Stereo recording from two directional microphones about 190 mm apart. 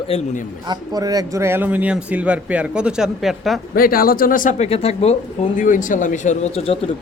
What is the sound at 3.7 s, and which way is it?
Speech, 50° left (ahead or behind).